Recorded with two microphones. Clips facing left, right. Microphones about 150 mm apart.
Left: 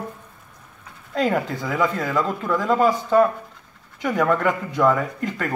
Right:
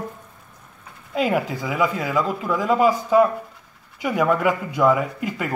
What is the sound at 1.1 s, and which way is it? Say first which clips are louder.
Speech: even; 10° right (ahead or behind).